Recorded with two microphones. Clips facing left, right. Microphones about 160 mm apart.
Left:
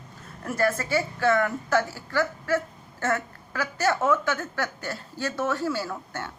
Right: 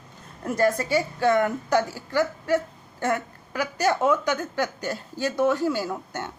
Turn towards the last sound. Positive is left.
turn(degrees=-20)  # may be behind; listen again after turning